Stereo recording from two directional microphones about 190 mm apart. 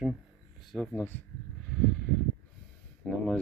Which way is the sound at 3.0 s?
5° left (ahead or behind).